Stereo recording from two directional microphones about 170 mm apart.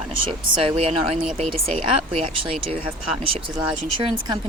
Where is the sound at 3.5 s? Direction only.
25° right (ahead or behind).